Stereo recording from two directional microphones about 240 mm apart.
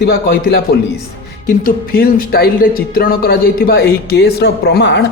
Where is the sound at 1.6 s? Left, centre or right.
Left.